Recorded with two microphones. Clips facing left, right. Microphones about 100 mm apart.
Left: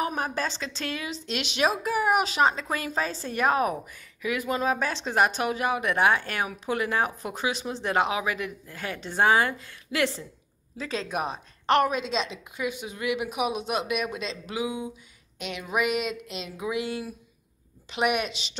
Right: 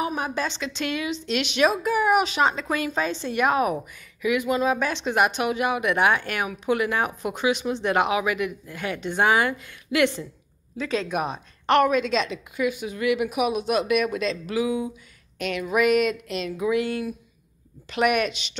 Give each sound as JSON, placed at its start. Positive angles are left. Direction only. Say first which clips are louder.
{"t": 0.1, "sound": "speech", "louder": "right 2 dB", "side_deg": 40}
{"t": 7.1, "sound": "speech", "louder": "right 5 dB", "side_deg": -20}
{"t": 7.3, "sound": "a woman's voice", "louder": "right 7 dB", "side_deg": 35}